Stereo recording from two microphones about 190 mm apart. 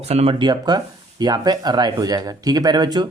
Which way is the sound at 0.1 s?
30° right (ahead or behind).